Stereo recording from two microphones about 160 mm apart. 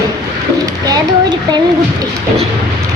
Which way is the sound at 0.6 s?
25° right (ahead or behind).